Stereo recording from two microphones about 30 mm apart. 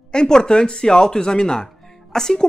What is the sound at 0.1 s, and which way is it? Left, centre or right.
Speech, left.